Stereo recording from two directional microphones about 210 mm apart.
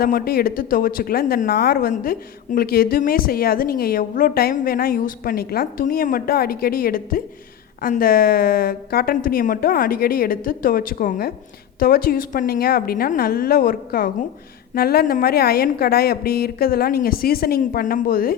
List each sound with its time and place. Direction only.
0.0 s speech: 45° left (ahead or behind)